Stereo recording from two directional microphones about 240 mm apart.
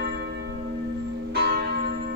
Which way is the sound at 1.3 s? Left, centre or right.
Right.